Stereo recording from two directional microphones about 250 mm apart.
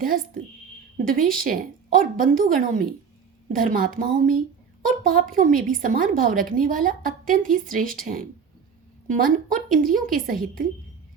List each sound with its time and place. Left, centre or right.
0.0 s a woman's voice: right
9.0 s a woman's voice: right